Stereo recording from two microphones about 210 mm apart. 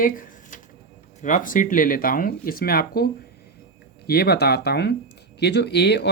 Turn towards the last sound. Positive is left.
turn(degrees=55)  # may be behind; listen again after turning